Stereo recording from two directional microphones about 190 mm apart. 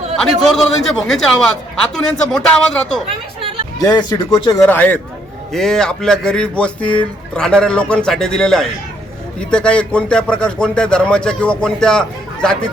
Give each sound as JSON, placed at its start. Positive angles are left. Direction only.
{"t": 0.4, "sound": "speech", "side_deg": 0}
{"t": 3.8, "sound": "speech", "side_deg": 20}
{"t": 4.6, "sound": "speech", "side_deg": 10}